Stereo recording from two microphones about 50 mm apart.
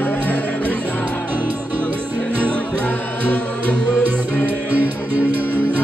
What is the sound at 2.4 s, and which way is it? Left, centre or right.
Music, left.